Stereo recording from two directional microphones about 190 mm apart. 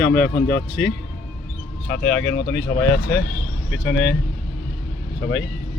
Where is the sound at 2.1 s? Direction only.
65° left (ahead or behind).